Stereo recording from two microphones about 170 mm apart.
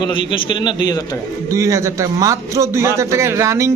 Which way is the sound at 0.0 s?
30° left (ahead or behind).